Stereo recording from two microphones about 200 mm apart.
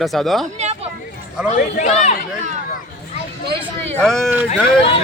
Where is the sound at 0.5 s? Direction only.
30° right (ahead or behind).